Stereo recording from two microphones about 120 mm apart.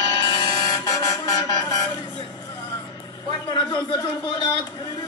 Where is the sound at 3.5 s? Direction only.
40° left (ahead or behind).